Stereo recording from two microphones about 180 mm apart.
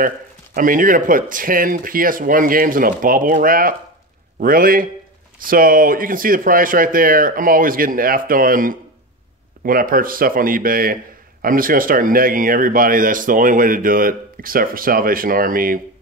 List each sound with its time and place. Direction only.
0.6 s speech: 50° right (ahead or behind)